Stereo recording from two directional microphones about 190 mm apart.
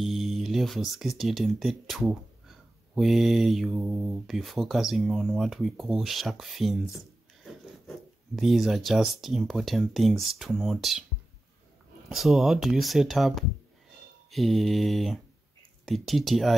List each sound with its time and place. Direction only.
0.0 s speech: centre (ahead or behind)
8.4 s speech: centre (ahead or behind)
12.1 s speech: centre (ahead or behind)